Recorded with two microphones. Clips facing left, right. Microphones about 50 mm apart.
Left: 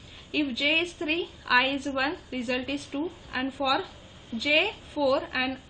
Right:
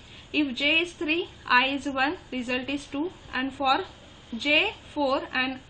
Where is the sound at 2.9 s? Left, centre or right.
Right.